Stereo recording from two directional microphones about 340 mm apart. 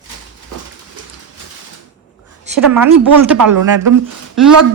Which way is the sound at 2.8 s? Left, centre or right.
Right.